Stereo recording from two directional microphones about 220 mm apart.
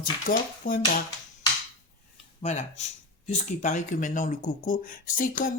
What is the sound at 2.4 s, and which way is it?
Speech, 30° left (ahead or behind).